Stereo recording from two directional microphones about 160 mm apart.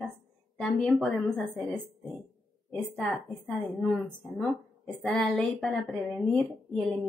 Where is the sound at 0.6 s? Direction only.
5° left (ahead or behind).